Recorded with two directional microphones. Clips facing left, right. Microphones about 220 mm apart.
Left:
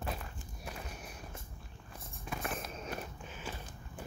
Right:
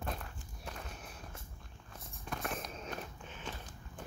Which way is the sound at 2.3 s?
5° left (ahead or behind).